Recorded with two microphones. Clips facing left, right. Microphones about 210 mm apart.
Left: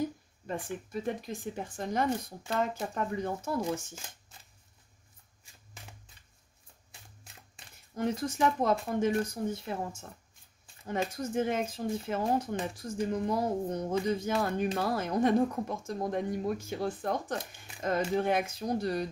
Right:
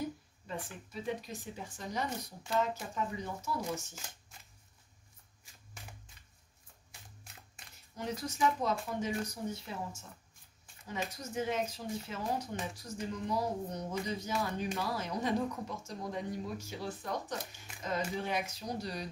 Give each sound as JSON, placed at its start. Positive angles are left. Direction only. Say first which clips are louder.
{"t": 0.5, "sound": "speech", "louder": "left 7 dB", "side_deg": 50}
{"t": 7.9, "sound": "speech", "louder": "left 7 dB", "side_deg": 55}